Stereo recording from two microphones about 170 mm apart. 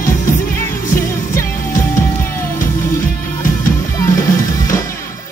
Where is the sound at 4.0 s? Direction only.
20° left (ahead or behind).